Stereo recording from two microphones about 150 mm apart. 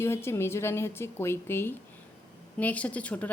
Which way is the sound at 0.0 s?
15° left (ahead or behind).